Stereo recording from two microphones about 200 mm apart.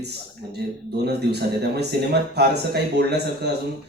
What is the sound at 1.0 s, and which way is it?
Speech, 55° right (ahead or behind).